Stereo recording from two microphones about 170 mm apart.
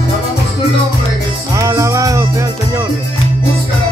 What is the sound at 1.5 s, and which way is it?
Music, 20° right (ahead or behind).